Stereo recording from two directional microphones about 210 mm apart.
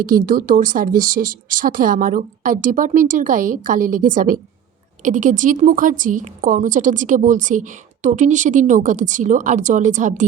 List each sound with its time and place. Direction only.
0.3 s a woman's voice: 40° right (ahead or behind)